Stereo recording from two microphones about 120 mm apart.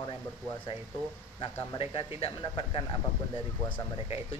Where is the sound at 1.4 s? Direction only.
45° left (ahead or behind).